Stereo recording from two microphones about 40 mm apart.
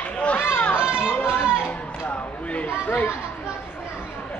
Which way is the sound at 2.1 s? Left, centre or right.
Left.